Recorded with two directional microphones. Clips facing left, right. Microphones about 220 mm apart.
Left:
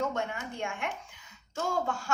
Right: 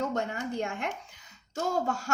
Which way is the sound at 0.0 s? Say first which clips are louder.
Right 2 dB; 40° right (ahead or behind).